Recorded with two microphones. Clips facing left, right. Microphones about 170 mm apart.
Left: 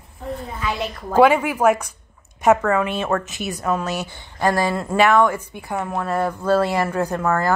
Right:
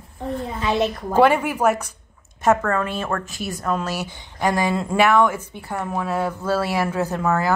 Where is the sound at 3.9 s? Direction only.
15° right (ahead or behind).